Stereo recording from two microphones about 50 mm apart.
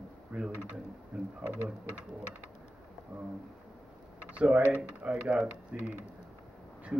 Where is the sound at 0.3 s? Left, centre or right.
Right.